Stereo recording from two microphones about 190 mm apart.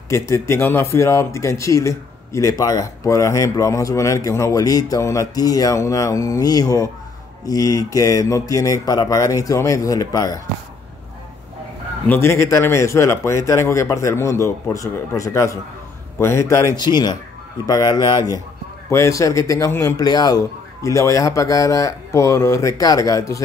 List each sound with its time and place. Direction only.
0.1 s speech: 15° left (ahead or behind)
12.1 s speech: 15° left (ahead or behind)